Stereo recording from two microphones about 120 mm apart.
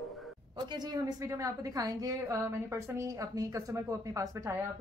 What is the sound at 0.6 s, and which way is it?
A woman's voice, 40° right (ahead or behind).